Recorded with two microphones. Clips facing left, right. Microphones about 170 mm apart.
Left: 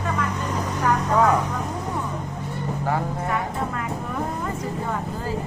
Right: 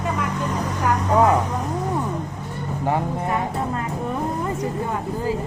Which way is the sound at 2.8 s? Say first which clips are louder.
Right 4 dB; 20° right (ahead or behind).